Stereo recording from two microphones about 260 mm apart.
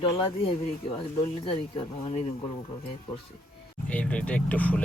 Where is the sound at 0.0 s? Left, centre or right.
Centre.